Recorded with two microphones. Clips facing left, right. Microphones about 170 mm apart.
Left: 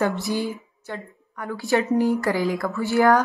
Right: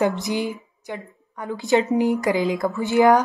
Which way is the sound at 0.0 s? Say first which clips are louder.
Right 2 dB; 20° right (ahead or behind).